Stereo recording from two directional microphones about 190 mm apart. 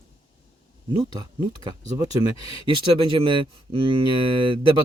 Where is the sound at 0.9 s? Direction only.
20° right (ahead or behind).